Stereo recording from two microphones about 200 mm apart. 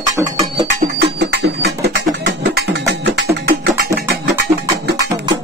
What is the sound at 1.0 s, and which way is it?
Music, 55° right (ahead or behind).